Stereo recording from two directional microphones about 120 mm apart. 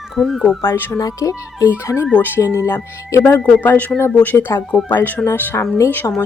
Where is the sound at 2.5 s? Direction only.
25° left (ahead or behind).